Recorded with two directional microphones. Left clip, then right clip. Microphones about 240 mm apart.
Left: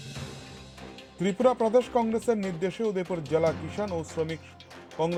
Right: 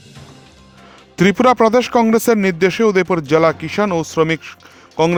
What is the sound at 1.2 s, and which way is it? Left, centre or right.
Speech, right.